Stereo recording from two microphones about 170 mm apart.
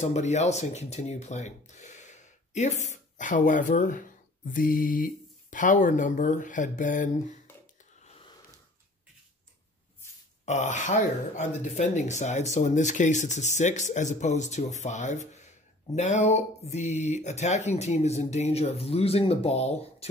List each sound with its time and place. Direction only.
0.0 s speech: 40° left (ahead or behind)
10.4 s speech: 45° left (ahead or behind)